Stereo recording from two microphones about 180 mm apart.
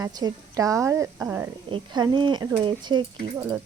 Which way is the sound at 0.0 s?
20° right (ahead or behind).